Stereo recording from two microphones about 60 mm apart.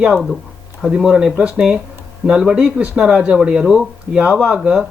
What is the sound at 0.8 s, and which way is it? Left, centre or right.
Speech, centre.